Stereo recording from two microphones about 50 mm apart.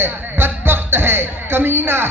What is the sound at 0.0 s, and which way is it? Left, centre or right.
Music, right.